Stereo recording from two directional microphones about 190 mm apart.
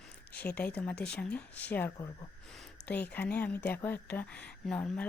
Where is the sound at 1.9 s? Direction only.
20° left (ahead or behind).